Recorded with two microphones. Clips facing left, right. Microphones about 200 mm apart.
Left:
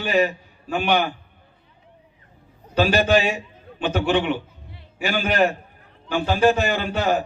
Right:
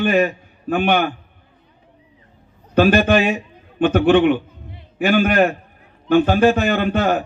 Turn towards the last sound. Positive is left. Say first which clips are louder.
# right 4 dB
turn(degrees=-55)  # may be behind; listen again after turning